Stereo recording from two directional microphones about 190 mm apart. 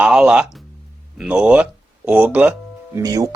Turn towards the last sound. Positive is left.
turn(degrees=-20)  # may be behind; listen again after turning